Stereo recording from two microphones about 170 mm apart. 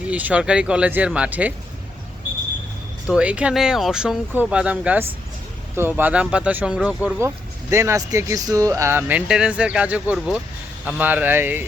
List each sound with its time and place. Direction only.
0.1 s speech: 10° right (ahead or behind)
3.1 s speech: 5° right (ahead or behind)